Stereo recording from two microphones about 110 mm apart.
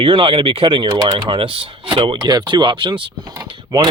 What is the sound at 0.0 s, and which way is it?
Speech, 50° right (ahead or behind).